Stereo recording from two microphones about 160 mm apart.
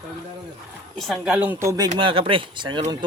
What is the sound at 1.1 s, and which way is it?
Speech, 5° right (ahead or behind).